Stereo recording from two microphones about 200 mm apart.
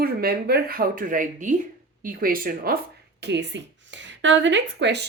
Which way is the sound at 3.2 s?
60° right (ahead or behind).